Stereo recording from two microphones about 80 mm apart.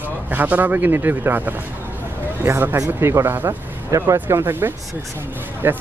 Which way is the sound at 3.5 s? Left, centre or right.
Right.